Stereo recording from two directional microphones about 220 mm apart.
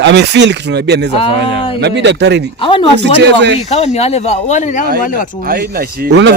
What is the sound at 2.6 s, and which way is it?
Speech, 25° left (ahead or behind).